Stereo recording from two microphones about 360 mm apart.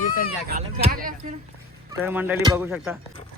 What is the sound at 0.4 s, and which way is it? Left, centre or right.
Speech, right.